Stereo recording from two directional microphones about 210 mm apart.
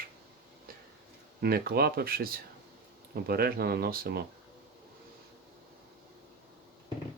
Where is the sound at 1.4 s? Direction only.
45° right (ahead or behind).